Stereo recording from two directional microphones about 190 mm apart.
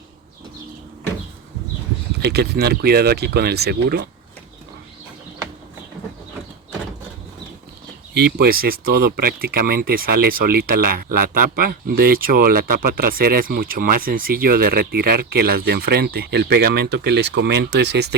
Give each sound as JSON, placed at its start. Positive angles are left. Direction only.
{"t": 2.2, "sound": "speech", "side_deg": -60}
{"t": 8.4, "sound": "speech", "side_deg": -50}